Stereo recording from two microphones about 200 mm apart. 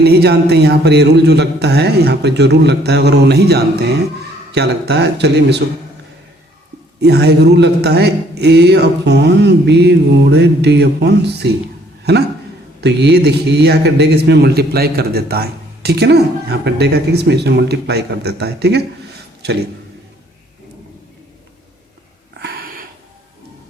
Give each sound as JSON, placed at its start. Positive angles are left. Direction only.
{"t": 0.0, "sound": "a man's voice", "side_deg": -55}
{"t": 7.0, "sound": "a man's voice", "side_deg": -55}
{"t": 12.8, "sound": "a man's voice", "side_deg": -55}
{"t": 22.4, "sound": "wheeze", "side_deg": -50}